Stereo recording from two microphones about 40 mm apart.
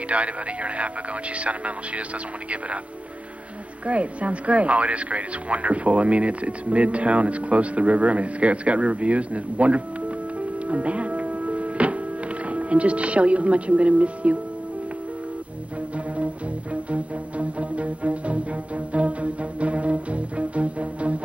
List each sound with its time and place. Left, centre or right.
0.1 s speech: right
3.8 s speech: right
16.9 s music: right